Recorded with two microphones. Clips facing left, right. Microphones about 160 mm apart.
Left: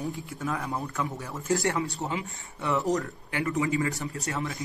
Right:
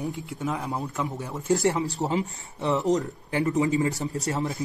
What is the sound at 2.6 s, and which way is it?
Speech, 20° right (ahead or behind).